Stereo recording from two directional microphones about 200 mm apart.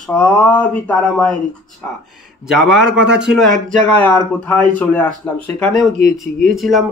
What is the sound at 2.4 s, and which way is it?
Speech, 5° right (ahead or behind).